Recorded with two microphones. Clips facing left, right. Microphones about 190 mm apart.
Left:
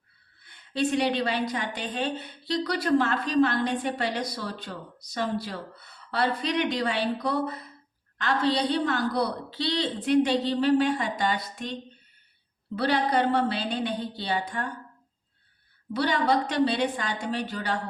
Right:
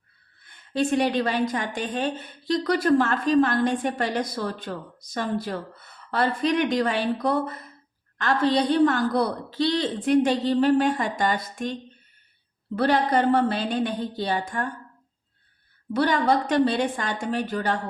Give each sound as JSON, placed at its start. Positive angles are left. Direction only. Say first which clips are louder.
{"t": 0.4, "sound": "a woman's voice", "louder": "right 2 dB", "side_deg": -45}
{"t": 12.7, "sound": "a woman's voice", "louder": "right 3 dB", "side_deg": -50}
{"t": 15.9, "sound": "a woman's voice", "louder": "right 3 dB", "side_deg": -50}